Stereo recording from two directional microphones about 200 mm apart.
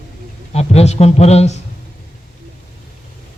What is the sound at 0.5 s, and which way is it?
A man's voice, 30° left (ahead or behind).